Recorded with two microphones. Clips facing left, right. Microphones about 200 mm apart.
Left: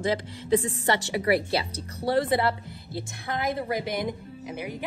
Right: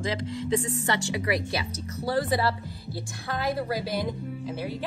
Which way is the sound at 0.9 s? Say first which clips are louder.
Left 5 dB; 30° left (ahead or behind).